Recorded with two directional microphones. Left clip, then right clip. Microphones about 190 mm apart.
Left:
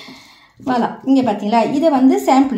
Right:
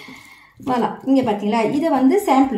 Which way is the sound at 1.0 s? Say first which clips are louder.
Left 2 dB; 25° left (ahead or behind).